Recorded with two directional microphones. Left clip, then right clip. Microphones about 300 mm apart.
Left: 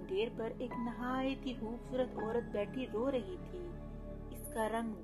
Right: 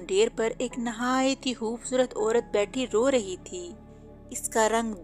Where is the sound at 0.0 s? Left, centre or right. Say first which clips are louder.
Right 13 dB; right.